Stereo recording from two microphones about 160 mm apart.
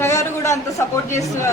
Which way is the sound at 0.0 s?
20° left (ahead or behind).